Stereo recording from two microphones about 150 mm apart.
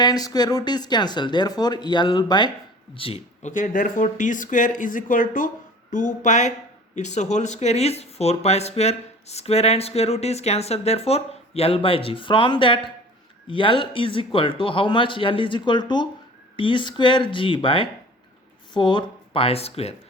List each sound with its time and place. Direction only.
0.0 s speech: 25° left (ahead or behind)
3.4 s speech: 60° left (ahead or behind)